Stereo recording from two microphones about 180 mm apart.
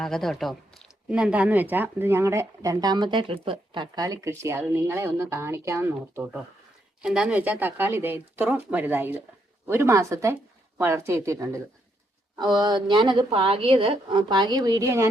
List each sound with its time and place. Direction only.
0.0 s a woman's voice: centre (ahead or behind); by 15.0 s 15° right (ahead or behind)